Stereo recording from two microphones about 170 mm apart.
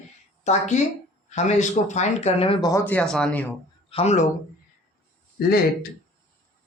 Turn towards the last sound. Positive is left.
turn(degrees=65)  # may be behind; listen again after turning